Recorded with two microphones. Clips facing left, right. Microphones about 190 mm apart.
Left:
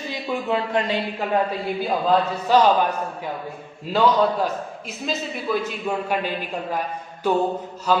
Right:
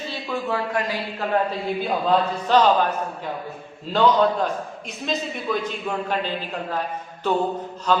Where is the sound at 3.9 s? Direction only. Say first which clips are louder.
Even; 5° left (ahead or behind).